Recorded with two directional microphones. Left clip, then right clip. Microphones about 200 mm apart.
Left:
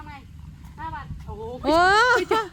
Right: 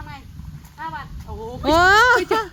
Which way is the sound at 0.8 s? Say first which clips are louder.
Right 4 dB; centre (ahead or behind).